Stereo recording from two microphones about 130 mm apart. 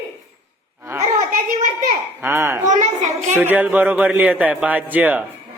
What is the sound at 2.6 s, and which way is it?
Speech, 65° right (ahead or behind).